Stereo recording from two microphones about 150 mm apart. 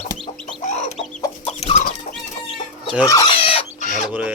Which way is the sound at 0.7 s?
50° left (ahead or behind).